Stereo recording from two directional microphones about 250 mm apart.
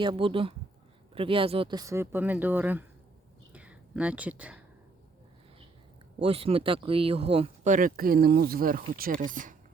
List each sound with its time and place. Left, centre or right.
0.0 s speech: centre
3.5 s whispering: centre
6.2 s speech: right